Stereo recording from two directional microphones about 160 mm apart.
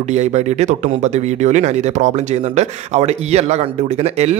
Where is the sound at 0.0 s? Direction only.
45° right (ahead or behind).